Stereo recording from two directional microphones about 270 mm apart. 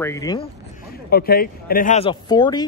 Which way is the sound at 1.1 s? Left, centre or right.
Left.